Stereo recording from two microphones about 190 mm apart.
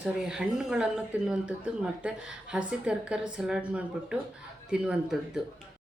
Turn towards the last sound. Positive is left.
turn(degrees=-5)  # may be behind; listen again after turning